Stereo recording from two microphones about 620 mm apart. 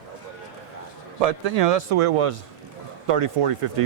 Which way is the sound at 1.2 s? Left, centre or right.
Right.